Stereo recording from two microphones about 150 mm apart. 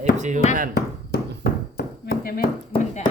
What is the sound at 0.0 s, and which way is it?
Chop, 55° right (ahead or behind).